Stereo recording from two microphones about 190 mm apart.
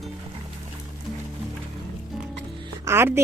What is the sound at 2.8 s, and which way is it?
Speech, 15° right (ahead or behind).